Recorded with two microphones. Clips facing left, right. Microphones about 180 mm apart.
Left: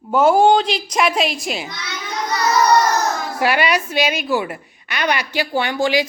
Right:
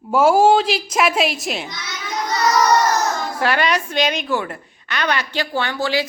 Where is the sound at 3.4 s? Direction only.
10° left (ahead or behind).